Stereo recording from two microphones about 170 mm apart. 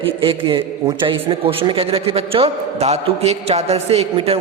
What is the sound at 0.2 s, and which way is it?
A woman's voice, 30° right (ahead or behind).